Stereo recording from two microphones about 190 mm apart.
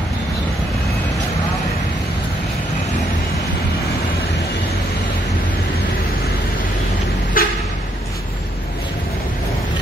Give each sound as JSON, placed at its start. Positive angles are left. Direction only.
{"t": 7.4, "sound": "vehicle", "side_deg": 50}